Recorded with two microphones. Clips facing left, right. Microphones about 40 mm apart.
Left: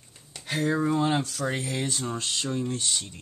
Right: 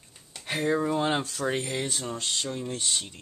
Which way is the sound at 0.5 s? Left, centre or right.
Centre.